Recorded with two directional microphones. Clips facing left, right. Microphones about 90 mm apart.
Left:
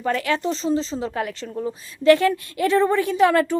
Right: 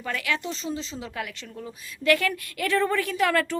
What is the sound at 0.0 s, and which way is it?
Speech, 35° left (ahead or behind).